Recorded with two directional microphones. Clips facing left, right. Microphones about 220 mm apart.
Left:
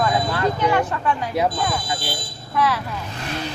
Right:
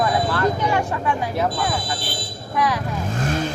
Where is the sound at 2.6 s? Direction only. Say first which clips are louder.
Left 1 dB; 15° right (ahead or behind).